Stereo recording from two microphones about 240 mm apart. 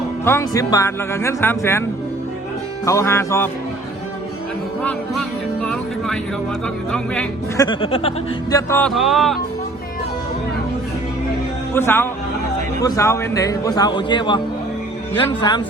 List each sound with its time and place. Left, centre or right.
0.3 s speech: centre
2.8 s speech: centre
4.8 s speech: centre
7.6 s speech: left; by 9.4 s centre
11.7 s speech: centre